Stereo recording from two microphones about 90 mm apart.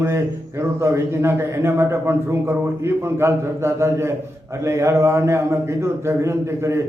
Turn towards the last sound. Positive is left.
turn(degrees=-30)  # may be behind; listen again after turning